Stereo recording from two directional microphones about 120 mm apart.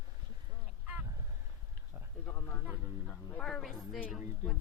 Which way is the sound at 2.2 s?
25° left (ahead or behind).